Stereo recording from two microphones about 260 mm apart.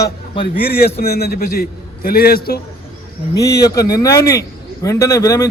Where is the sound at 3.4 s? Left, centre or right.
Centre.